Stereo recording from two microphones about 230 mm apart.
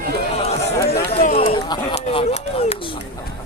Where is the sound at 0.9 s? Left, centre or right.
Left.